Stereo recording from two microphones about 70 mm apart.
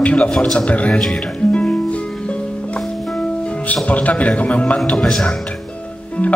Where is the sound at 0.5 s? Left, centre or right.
Centre.